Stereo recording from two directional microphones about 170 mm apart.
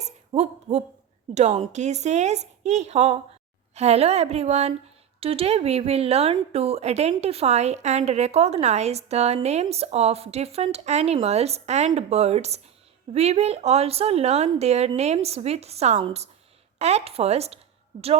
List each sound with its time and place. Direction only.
0.3 s a woman's voice: 40° right (ahead or behind)